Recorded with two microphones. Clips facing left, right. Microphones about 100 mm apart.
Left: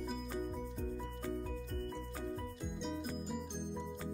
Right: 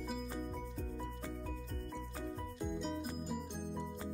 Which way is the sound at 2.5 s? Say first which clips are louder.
Right 2 dB; centre (ahead or behind).